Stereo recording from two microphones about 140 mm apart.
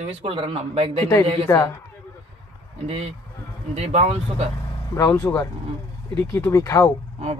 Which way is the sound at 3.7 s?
50° right (ahead or behind).